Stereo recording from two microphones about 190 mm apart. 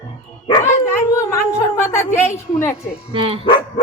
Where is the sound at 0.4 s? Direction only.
25° left (ahead or behind).